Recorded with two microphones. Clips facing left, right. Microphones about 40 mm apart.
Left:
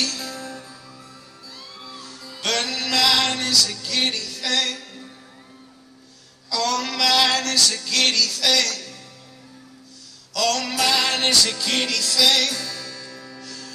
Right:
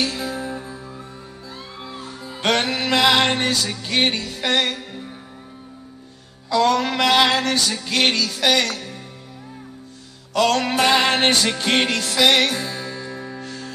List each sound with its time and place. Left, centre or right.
0.0 s music: right
6.5 s music: right
10.3 s music: right